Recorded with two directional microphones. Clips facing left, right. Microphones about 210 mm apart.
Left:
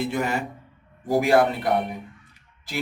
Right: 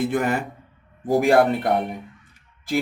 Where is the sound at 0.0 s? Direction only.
50° right (ahead or behind).